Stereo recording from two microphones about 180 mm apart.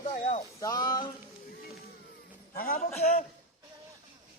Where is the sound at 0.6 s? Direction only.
20° left (ahead or behind).